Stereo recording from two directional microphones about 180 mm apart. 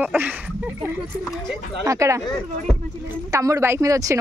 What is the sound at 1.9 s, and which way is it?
Speech, 15° right (ahead or behind).